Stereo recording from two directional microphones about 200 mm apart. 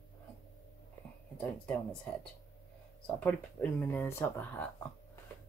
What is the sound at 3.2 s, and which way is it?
Speech, 10° left (ahead or behind).